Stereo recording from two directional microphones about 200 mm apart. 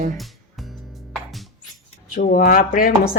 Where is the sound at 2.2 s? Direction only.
40° left (ahead or behind).